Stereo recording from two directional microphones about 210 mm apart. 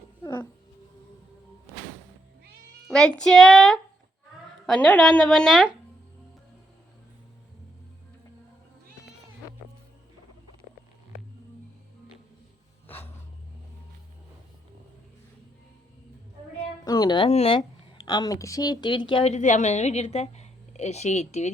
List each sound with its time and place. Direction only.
0.2 s cat: 15° left (ahead or behind)
2.8 s speech: 5° left (ahead or behind)
12.9 s a sound: 10° left (ahead or behind)
16.8 s a woman's voice: 20° left (ahead or behind)